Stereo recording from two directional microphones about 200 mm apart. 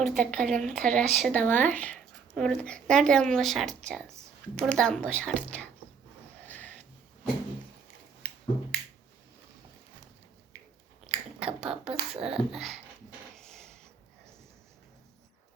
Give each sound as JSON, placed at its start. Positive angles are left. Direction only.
{"t": 0.0, "sound": "a woman's voice", "side_deg": 0}
{"t": 11.0, "sound": "a woman's voice", "side_deg": -5}
{"t": 13.3, "sound": "a sound", "side_deg": 5}